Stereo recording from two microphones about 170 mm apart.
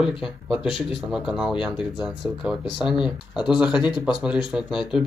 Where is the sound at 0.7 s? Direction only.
30° left (ahead or behind).